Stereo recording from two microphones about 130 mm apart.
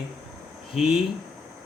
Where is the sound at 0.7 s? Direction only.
Centre (ahead or behind).